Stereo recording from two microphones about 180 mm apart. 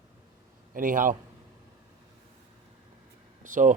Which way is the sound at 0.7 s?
50° right (ahead or behind).